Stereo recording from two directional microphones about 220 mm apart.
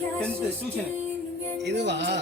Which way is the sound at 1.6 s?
50° right (ahead or behind).